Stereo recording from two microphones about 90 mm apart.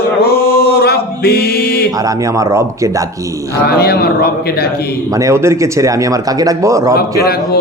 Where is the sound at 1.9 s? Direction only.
40° right (ahead or behind).